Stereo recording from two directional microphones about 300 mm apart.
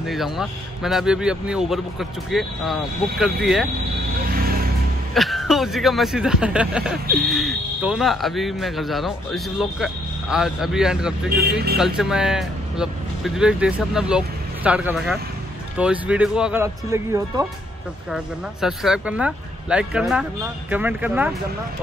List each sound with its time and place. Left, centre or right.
0.0 s speech: centre
4.3 s a sound: right
5.1 s speech: centre